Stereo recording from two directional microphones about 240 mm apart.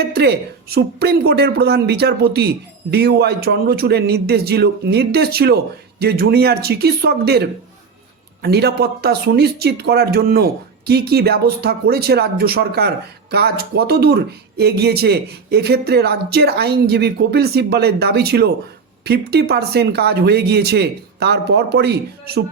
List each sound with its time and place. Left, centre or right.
0.0 s speech: right